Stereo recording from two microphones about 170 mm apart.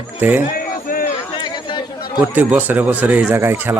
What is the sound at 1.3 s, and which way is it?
Chatter, 25° left (ahead or behind).